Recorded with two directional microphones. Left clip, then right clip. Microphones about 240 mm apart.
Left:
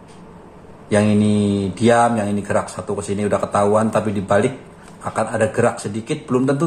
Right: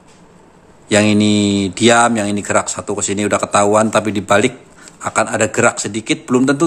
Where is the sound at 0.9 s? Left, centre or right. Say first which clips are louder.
Right 4 dB; right.